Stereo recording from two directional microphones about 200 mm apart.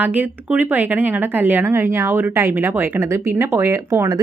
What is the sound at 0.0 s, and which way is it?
Speech, 10° right (ahead or behind).